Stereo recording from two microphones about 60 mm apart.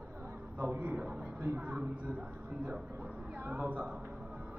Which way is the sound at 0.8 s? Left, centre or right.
Right.